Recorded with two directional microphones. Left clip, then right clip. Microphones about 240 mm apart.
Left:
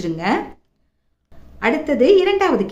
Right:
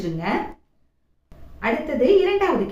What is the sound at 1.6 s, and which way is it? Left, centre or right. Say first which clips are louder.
Speech: left 4 dB; left.